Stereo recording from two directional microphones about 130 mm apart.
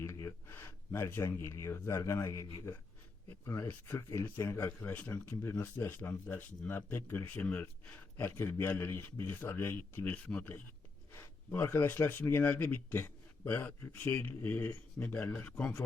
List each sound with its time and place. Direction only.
0.0 s a man's voice: 25° left (ahead or behind)